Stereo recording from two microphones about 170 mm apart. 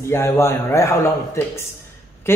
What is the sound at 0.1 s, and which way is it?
Speech, 15° left (ahead or behind).